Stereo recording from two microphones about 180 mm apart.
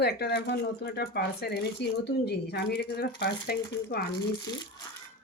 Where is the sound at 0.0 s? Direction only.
65° left (ahead or behind).